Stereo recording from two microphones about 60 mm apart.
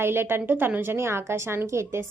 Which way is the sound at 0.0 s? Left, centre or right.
Right.